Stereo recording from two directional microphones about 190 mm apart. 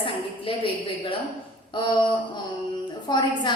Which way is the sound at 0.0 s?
30° left (ahead or behind).